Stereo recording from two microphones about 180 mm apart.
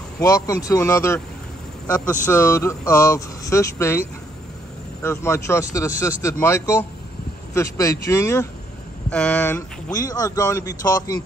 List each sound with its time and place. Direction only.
0.2 s speech: 20° left (ahead or behind)